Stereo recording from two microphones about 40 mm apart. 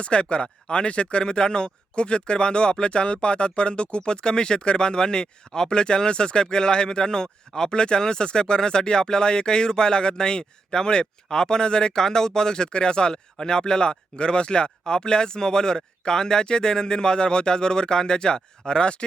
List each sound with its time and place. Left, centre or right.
0.0 s speech: left